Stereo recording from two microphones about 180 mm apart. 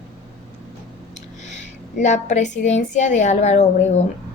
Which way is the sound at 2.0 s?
40° left (ahead or behind).